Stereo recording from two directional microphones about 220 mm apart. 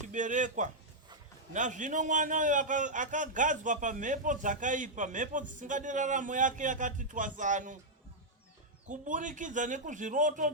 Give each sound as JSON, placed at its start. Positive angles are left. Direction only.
{"t": 0.1, "sound": "a man's voice", "side_deg": -35}
{"t": 8.9, "sound": "a man's voice", "side_deg": -35}